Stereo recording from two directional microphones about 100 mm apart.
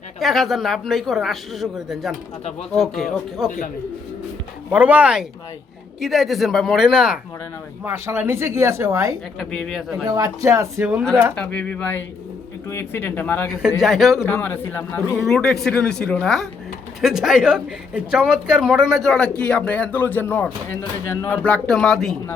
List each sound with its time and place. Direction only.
0.2 s speech: centre (ahead or behind)
4.7 s speech: 15° right (ahead or behind)
6.0 s speech: centre (ahead or behind)
7.9 s speech: 20° right (ahead or behind)
9.5 s speech: centre (ahead or behind)
10.1 s speech: 35° right (ahead or behind)
11.3 s a man's voice: 15° left (ahead or behind)
13.5 s speech: 5° right (ahead or behind)
14.3 s a man's voice: 20° left (ahead or behind)
15.2 s speech: 5° left (ahead or behind)